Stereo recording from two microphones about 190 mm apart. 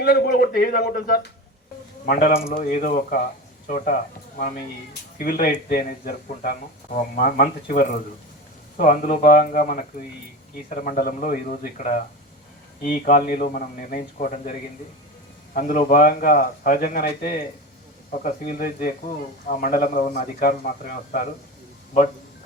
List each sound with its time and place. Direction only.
0.0 s speech: 55° left (ahead or behind)
5.1 s speech: 45° left (ahead or behind)
15.5 s speech: 45° left (ahead or behind)
18.5 s speech: 45° left (ahead or behind)